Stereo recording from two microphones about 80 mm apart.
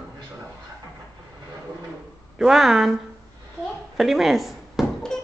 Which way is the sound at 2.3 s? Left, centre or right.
Centre.